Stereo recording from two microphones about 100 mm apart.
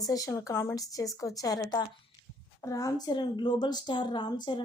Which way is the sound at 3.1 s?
50° left (ahead or behind).